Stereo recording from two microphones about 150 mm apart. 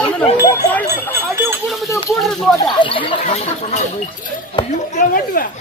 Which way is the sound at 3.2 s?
50° left (ahead or behind).